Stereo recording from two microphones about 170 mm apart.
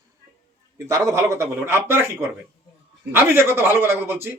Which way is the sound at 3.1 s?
15° right (ahead or behind).